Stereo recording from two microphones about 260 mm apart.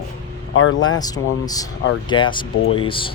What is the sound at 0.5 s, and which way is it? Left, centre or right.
Speech, left.